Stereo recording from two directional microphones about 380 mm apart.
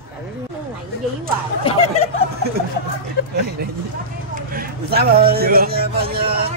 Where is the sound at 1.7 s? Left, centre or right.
Centre.